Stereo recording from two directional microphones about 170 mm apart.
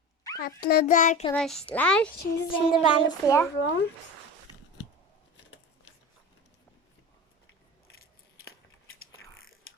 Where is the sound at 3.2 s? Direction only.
15° left (ahead or behind).